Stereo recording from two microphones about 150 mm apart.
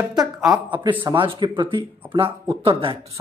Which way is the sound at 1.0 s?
35° right (ahead or behind).